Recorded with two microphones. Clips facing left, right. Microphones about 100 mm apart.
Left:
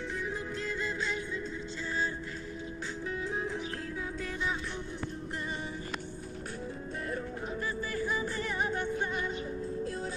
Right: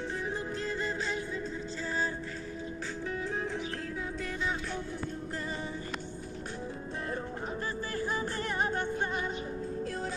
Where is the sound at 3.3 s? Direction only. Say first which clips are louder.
Left 1 dB; 35° right (ahead or behind).